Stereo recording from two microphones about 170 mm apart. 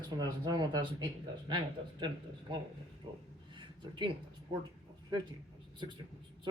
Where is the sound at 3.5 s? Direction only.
25° right (ahead or behind).